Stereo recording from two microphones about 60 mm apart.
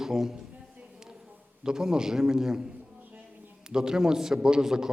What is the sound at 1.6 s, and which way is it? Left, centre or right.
A man's voice, centre.